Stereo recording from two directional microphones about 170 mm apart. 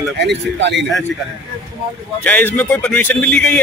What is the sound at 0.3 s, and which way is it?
Speech, 90° right.